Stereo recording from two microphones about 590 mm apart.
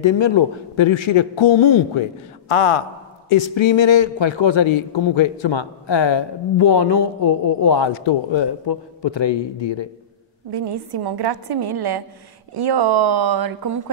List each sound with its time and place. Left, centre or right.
0.0 s a man's voice: left
10.5 s speech: right